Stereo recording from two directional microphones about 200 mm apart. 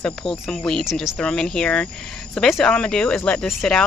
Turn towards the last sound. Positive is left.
turn(degrees=5)  # may be behind; listen again after turning